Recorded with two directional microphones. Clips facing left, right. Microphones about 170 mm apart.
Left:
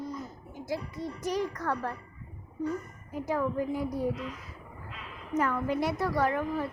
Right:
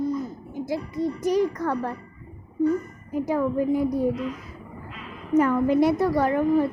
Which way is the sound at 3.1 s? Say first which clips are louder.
Right 6 dB; 15° right (ahead or behind).